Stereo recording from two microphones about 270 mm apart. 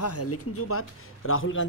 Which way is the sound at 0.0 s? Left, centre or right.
Left.